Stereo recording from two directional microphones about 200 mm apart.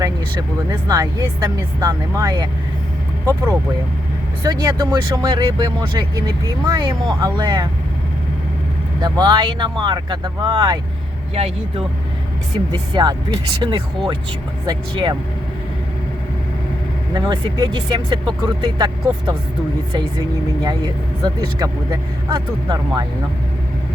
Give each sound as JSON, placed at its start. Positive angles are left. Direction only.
{"t": 0.7, "sound": "speech", "side_deg": -20}
{"t": 4.4, "sound": "speech", "side_deg": -20}
{"t": 9.0, "sound": "speech", "side_deg": -20}
{"t": 12.9, "sound": "speech", "side_deg": -20}
{"t": 17.2, "sound": "speech", "side_deg": -20}
{"t": 21.2, "sound": "speech", "side_deg": -20}